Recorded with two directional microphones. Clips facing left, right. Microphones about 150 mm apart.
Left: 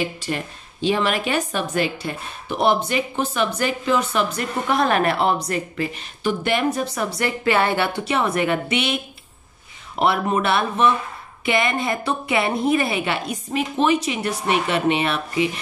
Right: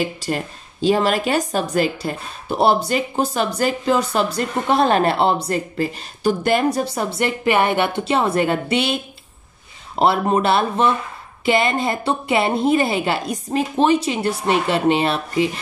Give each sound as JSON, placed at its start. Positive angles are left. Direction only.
{"t": 0.2, "sound": "a woman's voice", "side_deg": -40}